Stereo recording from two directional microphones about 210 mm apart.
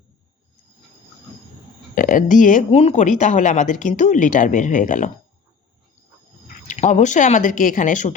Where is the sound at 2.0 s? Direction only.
40° left (ahead or behind).